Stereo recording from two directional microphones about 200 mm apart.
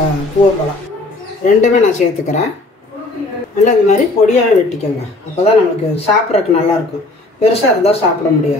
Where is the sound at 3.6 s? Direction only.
40° left (ahead or behind).